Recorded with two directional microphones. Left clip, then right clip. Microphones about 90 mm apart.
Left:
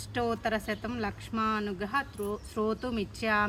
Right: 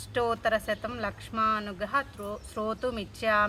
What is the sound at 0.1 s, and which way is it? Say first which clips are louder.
Speech: right 4 dB; 45° right (ahead or behind).